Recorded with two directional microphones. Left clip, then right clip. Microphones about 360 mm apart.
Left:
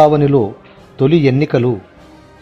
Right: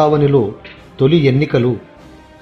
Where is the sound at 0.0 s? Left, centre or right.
Left.